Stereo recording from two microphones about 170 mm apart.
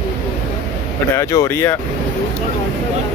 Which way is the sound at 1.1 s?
20° left (ahead or behind).